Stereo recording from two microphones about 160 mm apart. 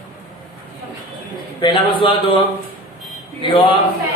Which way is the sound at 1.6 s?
30° left (ahead or behind).